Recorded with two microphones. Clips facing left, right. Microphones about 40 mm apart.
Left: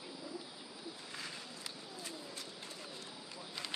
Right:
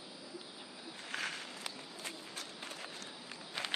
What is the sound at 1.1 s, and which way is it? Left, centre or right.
Walk, right.